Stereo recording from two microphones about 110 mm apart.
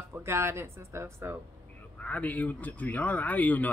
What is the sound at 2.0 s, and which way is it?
Speech, 15° left (ahead or behind).